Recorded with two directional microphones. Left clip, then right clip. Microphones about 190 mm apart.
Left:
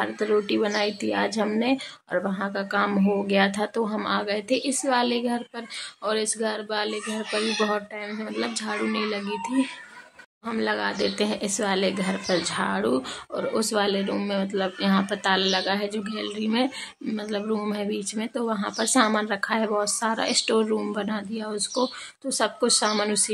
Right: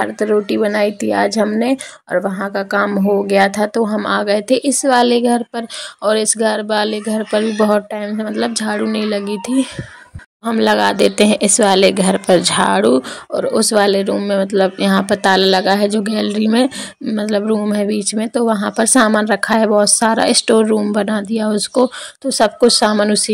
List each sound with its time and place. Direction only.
0.0 s a woman's voice: 30° right (ahead or behind)